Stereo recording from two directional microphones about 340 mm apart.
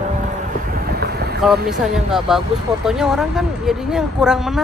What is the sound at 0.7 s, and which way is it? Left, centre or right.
Vehicle, right.